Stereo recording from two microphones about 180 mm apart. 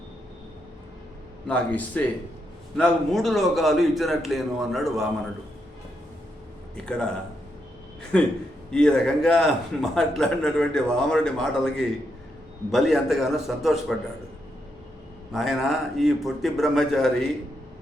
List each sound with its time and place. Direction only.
1.5 s a man's voice: 5° left (ahead or behind)
8.1 s a man's voice: 5° left (ahead or behind)
15.3 s a man's voice: centre (ahead or behind)